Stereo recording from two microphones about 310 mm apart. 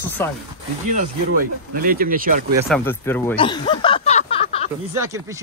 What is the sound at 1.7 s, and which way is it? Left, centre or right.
Speech, right.